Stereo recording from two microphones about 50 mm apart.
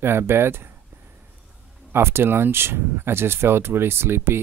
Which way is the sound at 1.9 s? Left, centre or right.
Right.